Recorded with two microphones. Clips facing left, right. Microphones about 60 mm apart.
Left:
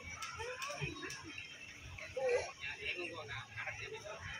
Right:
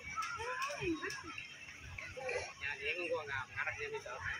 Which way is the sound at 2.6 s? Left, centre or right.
Right.